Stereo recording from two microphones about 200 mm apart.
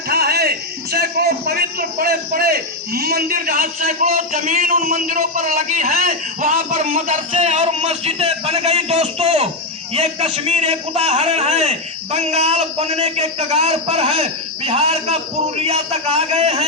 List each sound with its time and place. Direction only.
0.1 s a man's voice: 50° right (ahead or behind); by 16.6 s 30° right (ahead or behind)